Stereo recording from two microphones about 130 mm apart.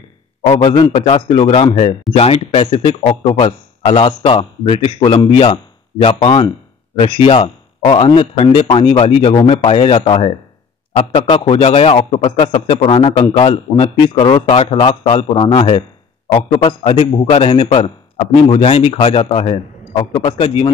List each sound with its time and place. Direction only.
0.5 s a man's voice: 50° left (ahead or behind)